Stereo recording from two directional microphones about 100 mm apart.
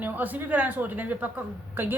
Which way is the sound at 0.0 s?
15° right (ahead or behind).